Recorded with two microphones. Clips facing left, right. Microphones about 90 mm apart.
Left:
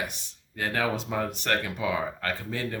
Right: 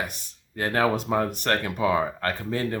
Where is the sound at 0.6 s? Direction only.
40° right (ahead or behind).